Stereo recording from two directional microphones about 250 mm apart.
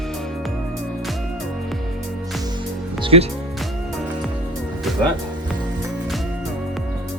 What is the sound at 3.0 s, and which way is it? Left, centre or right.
Music, right.